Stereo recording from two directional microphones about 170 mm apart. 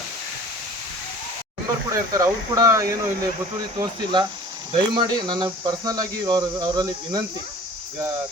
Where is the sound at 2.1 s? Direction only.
20° right (ahead or behind).